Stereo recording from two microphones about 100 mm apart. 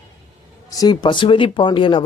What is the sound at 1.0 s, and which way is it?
Speech, 55° left (ahead or behind).